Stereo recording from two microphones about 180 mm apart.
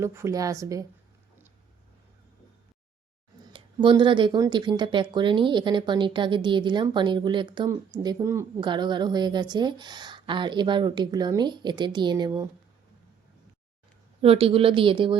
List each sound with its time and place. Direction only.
0.0 s a woman's voice: 15° right (ahead or behind)
3.5 s speech: 25° right (ahead or behind)
14.2 s speech: 30° right (ahead or behind)